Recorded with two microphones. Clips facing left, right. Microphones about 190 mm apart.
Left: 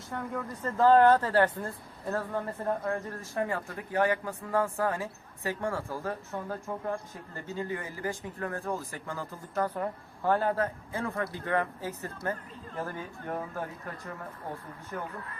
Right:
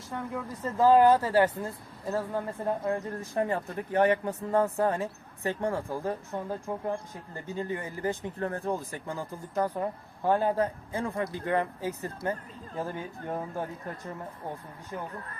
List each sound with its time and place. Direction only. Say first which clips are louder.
0.1 s speech: even; 5° right (ahead or behind)
14.9 s speech: even; 20° right (ahead or behind)